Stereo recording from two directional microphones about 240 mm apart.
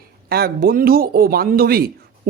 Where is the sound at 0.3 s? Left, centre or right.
Right.